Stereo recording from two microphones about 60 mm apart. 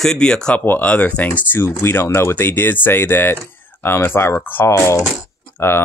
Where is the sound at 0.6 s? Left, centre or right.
Left.